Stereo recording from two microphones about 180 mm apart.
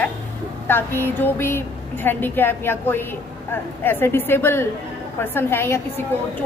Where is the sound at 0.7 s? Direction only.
10° left (ahead or behind).